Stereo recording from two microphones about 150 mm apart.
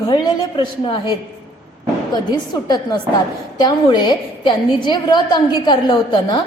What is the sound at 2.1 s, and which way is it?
A woman's voice, 30° left (ahead or behind).